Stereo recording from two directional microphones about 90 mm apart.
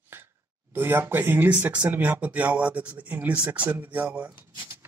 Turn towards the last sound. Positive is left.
turn(degrees=-20)  # may be behind; listen again after turning